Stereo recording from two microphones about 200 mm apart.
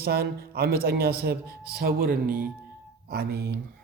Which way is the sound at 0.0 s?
50° right (ahead or behind).